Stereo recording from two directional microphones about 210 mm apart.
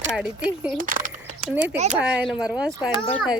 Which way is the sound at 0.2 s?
5° right (ahead or behind).